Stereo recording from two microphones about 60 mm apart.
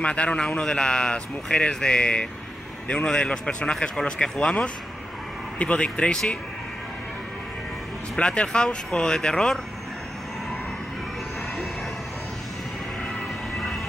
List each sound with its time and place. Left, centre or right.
0.0 s a man's voice: centre
8.2 s a man's voice: centre